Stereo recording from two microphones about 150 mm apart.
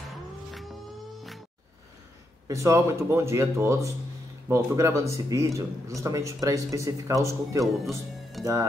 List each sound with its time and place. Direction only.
2.4 s speech: 20° right (ahead or behind)
8.4 s music: centre (ahead or behind)